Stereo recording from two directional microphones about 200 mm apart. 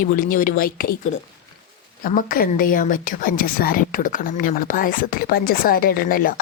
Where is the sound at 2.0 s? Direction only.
45° left (ahead or behind).